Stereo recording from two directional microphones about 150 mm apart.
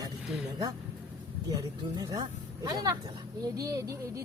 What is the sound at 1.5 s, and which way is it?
Speech, 25° right (ahead or behind).